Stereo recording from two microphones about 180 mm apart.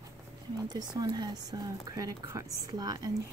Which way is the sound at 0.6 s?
20° right (ahead or behind).